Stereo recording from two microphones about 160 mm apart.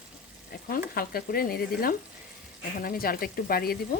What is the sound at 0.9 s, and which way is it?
Speech, 70° left (ahead or behind).